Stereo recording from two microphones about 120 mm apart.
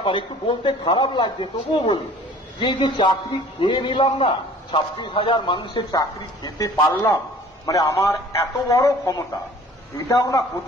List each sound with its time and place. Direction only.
0.0 s a man's voice: 45° left (ahead or behind)
5.9 s a man's voice: 30° left (ahead or behind)